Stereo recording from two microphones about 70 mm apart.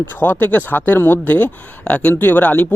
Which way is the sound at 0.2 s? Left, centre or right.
Left.